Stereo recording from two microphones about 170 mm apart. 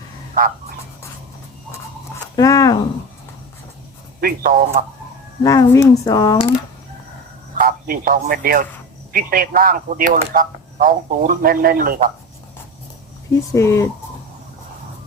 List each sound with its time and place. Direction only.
2.1 s speech: 20° left (ahead or behind)
4.2 s speech: 60° right (ahead or behind)
5.4 s speech: 20° left (ahead or behind)
7.6 s speech: 60° right (ahead or behind)
13.5 s speech: 15° left (ahead or behind)